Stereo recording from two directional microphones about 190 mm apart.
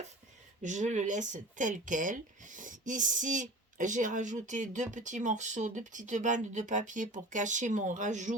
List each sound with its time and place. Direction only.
0.6 s speech: 40° right (ahead or behind)